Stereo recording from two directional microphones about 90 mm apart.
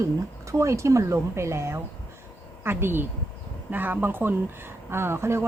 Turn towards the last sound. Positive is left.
turn(degrees=-30)  # may be behind; listen again after turning